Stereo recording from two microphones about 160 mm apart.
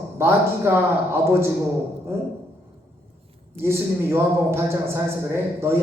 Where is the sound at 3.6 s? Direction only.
15° right (ahead or behind).